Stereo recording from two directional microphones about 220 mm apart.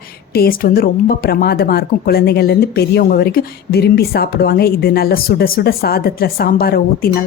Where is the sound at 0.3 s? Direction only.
45° left (ahead or behind).